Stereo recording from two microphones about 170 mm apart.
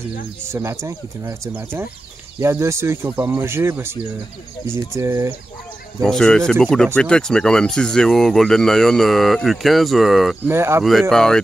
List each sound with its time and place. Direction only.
0.5 s speech: 15° right (ahead or behind)
6.0 s speech: 5° left (ahead or behind)
10.4 s speech: 15° right (ahead or behind)
10.8 s speech: centre (ahead or behind)